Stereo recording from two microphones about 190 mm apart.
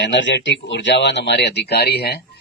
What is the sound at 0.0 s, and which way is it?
Speech, 65° left (ahead or behind).